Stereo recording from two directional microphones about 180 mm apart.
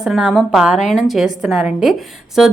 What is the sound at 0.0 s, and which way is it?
A woman's voice, 5° right (ahead or behind).